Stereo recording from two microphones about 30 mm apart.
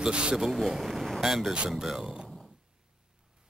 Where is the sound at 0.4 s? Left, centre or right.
Centre.